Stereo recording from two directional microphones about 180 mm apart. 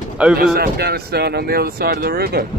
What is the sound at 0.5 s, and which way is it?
Speech, 60° right (ahead or behind).